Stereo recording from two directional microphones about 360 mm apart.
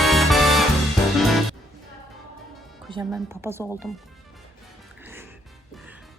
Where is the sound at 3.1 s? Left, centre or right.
Centre.